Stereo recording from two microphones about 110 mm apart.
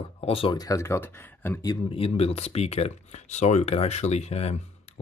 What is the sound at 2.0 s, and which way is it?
Speech, 60° left (ahead or behind).